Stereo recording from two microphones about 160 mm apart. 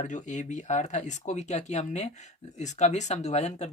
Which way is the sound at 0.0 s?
50° left (ahead or behind).